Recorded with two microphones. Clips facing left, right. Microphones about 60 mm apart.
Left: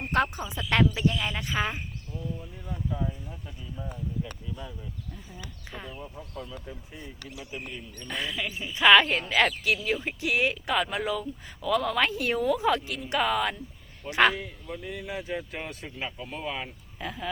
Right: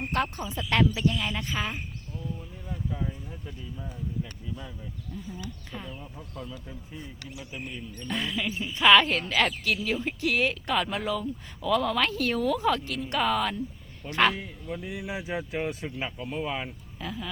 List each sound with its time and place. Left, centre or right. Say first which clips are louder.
0.3 s speech: even; centre
1.5 s speech: left 6 dB; centre
4.2 s speech: even; centre
5.7 s speech: left 4 dB; centre
12.0 s speech: left 1 dB; centre